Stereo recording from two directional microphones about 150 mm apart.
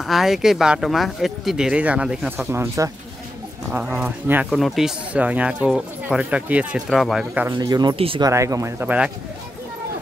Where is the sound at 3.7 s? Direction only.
10° right (ahead or behind).